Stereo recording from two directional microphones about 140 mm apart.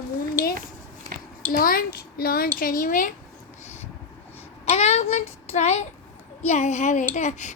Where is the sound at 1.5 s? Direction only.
90° left; by 3.1 s 70° left (ahead or behind).